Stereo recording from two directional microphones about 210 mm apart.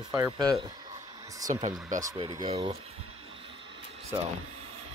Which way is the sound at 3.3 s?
25° right (ahead or behind).